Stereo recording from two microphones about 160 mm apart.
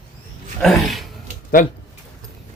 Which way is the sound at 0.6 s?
Centre (ahead or behind).